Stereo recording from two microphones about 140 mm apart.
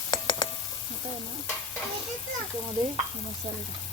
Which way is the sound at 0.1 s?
35° left (ahead or behind).